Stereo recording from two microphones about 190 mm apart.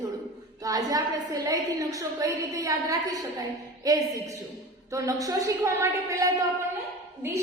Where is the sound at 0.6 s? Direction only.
20° right (ahead or behind).